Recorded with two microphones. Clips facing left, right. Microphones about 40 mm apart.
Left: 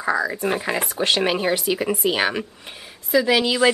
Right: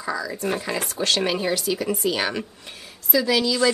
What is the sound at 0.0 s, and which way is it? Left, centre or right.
Speech, left.